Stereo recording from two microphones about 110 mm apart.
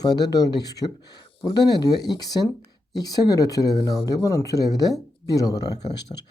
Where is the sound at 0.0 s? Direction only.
40° left (ahead or behind).